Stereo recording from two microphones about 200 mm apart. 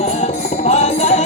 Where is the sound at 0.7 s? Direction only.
35° left (ahead or behind).